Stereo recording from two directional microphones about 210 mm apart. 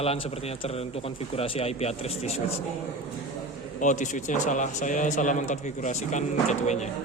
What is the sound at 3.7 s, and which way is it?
A man's voice, 35° left (ahead or behind).